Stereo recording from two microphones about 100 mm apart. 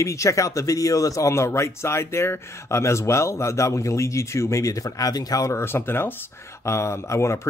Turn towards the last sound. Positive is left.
turn(degrees=30)  # may be behind; listen again after turning